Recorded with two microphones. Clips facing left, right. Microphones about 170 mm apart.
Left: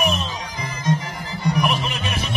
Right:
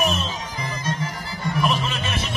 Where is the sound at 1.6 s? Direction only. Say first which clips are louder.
Even; 15° left (ahead or behind).